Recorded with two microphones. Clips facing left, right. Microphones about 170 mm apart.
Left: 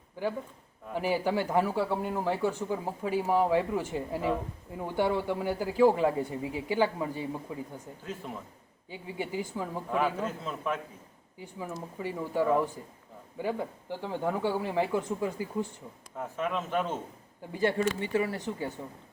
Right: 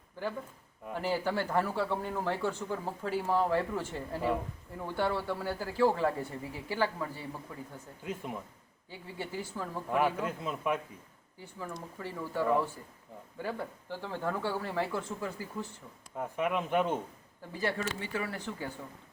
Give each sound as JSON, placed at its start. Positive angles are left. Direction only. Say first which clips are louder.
{"t": 0.2, "sound": "speech", "louder": "left 4 dB", "side_deg": 15}
{"t": 8.0, "sound": "speech", "louder": "right 2 dB", "side_deg": -10}
{"t": 8.9, "sound": "speech", "louder": "left 5 dB", "side_deg": 15}
{"t": 10.2, "sound": "speech", "louder": "even", "side_deg": -10}
{"t": 11.7, "sound": "speech", "louder": "left 7 dB", "side_deg": 15}
{"t": 16.1, "sound": "speech", "louder": "right 1 dB", "side_deg": -15}
{"t": 17.5, "sound": "speech", "louder": "left 6 dB", "side_deg": 20}